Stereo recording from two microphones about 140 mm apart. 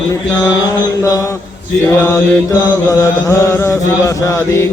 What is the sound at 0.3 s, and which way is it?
Chant, 25° left (ahead or behind).